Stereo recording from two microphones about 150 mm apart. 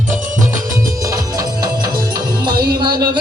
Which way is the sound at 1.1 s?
25° right (ahead or behind).